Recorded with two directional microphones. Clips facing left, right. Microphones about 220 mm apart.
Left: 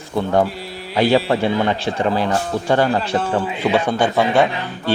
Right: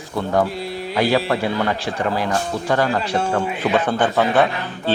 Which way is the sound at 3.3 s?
15° left (ahead or behind).